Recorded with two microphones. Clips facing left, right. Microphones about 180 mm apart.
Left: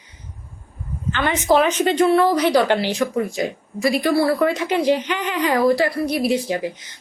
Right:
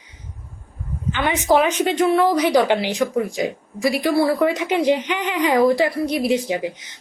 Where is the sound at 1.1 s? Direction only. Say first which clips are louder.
Even; 15° right (ahead or behind).